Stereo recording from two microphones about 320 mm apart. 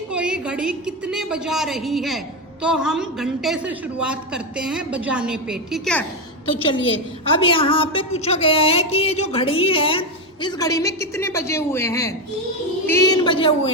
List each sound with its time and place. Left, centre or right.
0.1 s a woman's voice: centre
6.4 s a woman's voice: centre